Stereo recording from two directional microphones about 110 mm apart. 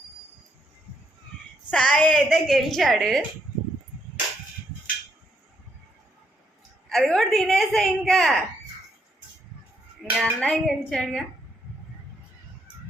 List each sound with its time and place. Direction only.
1.7 s a woman's voice: 10° left (ahead or behind)
2.3 s a woman's voice: centre (ahead or behind)
6.8 s a woman's voice: centre (ahead or behind)
10.2 s a woman's voice: 5° left (ahead or behind)